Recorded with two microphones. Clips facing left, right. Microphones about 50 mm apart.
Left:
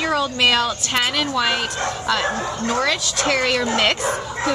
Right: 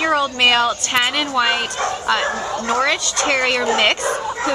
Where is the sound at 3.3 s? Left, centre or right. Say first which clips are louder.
Right 1 dB; centre.